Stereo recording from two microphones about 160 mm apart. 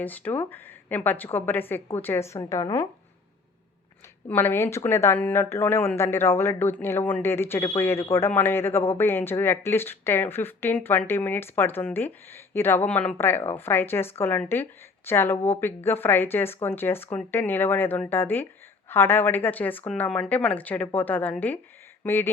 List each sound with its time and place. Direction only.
0.0 s speech: 10° left (ahead or behind)
4.3 s speech: 15° left (ahead or behind)